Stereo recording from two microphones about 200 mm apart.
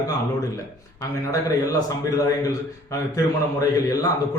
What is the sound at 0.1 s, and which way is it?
A man's voice, 15° left (ahead or behind).